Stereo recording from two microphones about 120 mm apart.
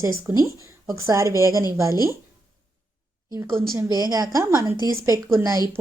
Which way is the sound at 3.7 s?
30° right (ahead or behind).